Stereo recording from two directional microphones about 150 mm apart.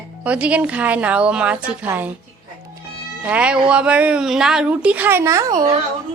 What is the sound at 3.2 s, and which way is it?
A woman's voice, 10° right (ahead or behind).